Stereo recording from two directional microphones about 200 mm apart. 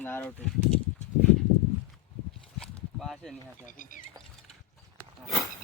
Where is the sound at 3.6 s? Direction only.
40° left (ahead or behind).